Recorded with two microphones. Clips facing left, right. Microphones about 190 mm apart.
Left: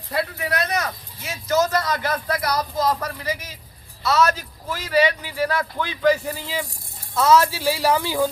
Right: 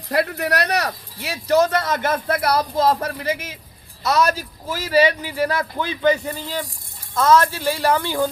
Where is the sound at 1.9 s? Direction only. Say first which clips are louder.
Right 3 dB; 50° right (ahead or behind).